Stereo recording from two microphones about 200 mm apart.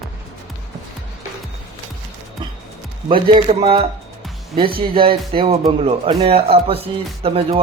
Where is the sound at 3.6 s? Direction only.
25° right (ahead or behind).